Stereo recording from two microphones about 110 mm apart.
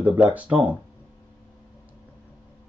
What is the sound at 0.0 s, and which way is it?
Speech, 15° right (ahead or behind).